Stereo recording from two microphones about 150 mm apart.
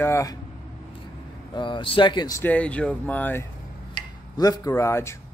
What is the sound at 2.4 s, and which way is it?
Speech, 10° left (ahead or behind).